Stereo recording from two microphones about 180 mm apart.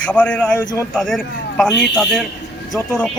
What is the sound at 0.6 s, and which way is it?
Speech, 25° left (ahead or behind).